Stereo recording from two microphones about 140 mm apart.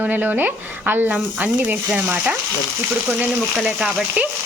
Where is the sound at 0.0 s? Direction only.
15° right (ahead or behind).